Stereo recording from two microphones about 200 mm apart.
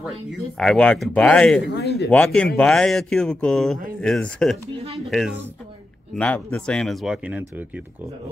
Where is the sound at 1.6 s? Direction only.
55° left (ahead or behind).